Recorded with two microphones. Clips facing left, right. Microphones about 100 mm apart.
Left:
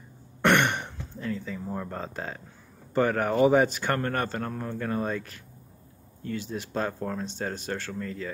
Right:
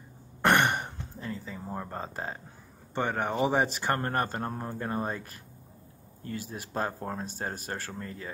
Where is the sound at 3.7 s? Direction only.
35° right (ahead or behind).